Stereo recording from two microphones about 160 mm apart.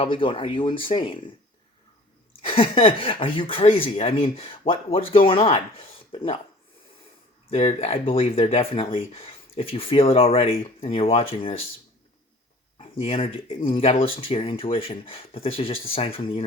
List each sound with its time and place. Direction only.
0.0 s speech: 35° left (ahead or behind)
2.4 s speech: 35° left (ahead or behind)
7.5 s speech: 40° left (ahead or behind)
13.0 s speech: 40° left (ahead or behind)